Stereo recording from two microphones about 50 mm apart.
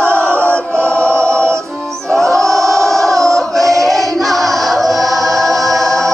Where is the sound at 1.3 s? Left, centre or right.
Right.